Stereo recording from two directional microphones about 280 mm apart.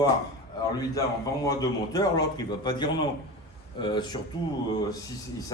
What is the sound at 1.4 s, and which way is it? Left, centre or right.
A man's voice, centre.